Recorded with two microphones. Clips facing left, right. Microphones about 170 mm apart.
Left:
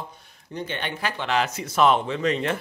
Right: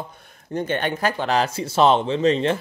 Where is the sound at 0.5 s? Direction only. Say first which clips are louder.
Right 7 dB; 50° right (ahead or behind).